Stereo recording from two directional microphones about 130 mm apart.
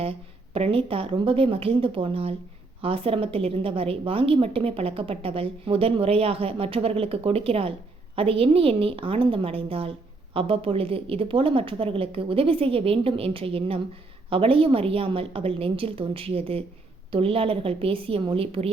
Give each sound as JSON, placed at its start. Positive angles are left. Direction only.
{"t": 0.5, "sound": "a woman's voice", "side_deg": -45}